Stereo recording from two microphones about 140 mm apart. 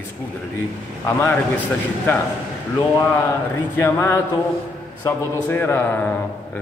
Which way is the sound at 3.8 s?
15° left (ahead or behind).